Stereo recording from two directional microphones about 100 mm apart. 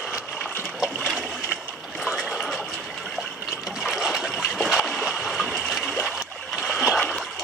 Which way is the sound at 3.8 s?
Centre (ahead or behind).